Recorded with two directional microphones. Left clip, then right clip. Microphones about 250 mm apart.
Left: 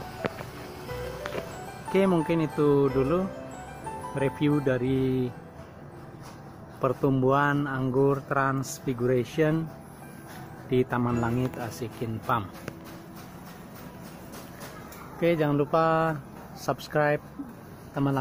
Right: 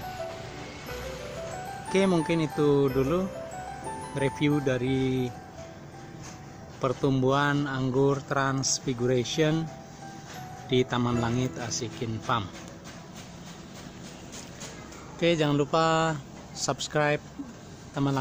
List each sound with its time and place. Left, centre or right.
1.9 s speech: centre
6.8 s speech: centre
10.7 s speech: centre
15.1 s speech: centre